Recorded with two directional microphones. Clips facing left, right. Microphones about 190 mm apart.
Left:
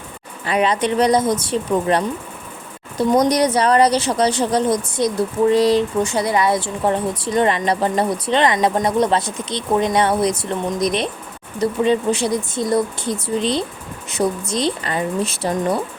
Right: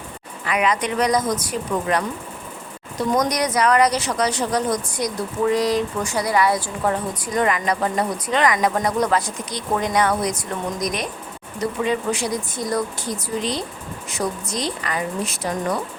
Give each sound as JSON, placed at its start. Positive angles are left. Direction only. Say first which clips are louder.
{"t": 0.4, "sound": "a woman's voice", "louder": "left 3 dB", "side_deg": 30}